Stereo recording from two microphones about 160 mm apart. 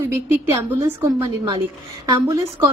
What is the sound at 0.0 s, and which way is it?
Speech, 15° right (ahead or behind).